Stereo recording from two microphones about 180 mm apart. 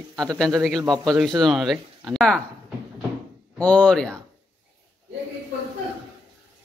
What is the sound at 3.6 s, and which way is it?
Speech, 5° left (ahead or behind).